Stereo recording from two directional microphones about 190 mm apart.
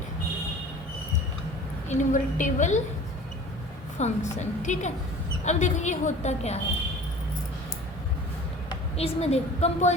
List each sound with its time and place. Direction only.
1.9 s a woman's voice: 40° left (ahead or behind)
3.9 s a woman's voice: 35° left (ahead or behind)
8.7 s a woman's voice: 30° left (ahead or behind)